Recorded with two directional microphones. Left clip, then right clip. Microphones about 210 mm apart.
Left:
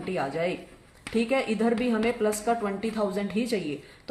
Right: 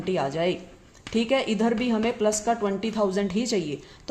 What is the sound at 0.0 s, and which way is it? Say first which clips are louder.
A woman's voice: right 3 dB; 50° right (ahead or behind).